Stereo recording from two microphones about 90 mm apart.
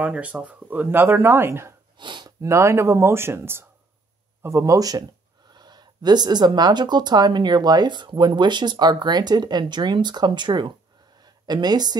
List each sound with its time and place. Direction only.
0.0 s speech: 15° right (ahead or behind)
2.0 s speech: 60° right (ahead or behind)
2.4 s speech: 35° right (ahead or behind); by 10.7 s 60° right (ahead or behind)
11.1 s a sound: 50° right (ahead or behind)